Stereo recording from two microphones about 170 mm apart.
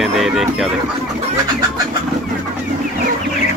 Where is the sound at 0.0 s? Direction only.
Centre (ahead or behind).